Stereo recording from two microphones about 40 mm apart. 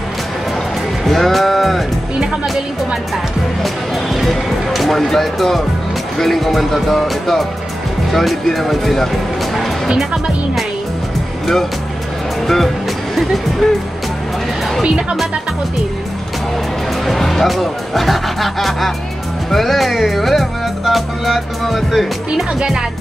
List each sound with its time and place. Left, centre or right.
1.0 s music: centre
2.4 s speech: centre
3.6 s music: centre
12.4 s speech: centre
14.8 s speech: right
17.0 s music: centre
22.6 s speech: centre